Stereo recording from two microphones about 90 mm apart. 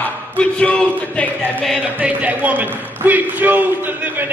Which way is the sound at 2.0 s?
15° right (ahead or behind).